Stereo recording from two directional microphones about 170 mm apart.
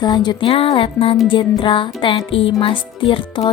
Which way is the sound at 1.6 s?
30° left (ahead or behind).